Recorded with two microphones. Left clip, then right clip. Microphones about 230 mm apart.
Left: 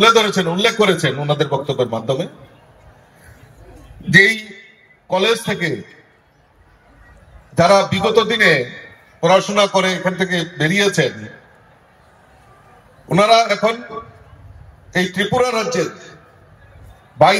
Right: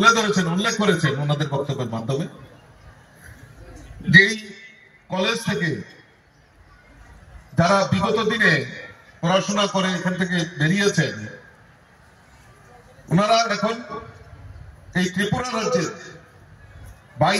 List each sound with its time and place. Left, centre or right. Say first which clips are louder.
0.0 s a man's voice: left 5 dB; left
4.1 s a man's voice: left 3 dB; left
7.5 s a man's voice: left 6 dB; left
13.1 s a man's voice: left 6 dB; left
14.9 s a man's voice: left 6 dB; left